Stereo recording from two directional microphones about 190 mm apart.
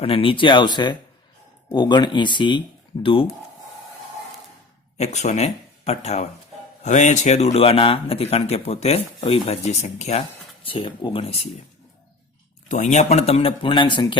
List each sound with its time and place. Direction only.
0.0 s speech: 30° left (ahead or behind)
4.9 s speech: 35° left (ahead or behind)
12.6 s speech: 40° left (ahead or behind); by 14.2 s 25° left (ahead or behind)